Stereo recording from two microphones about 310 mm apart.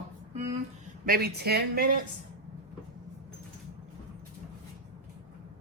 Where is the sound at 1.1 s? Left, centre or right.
Right.